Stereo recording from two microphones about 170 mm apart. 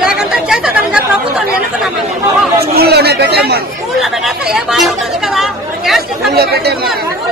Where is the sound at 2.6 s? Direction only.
65° right (ahead or behind).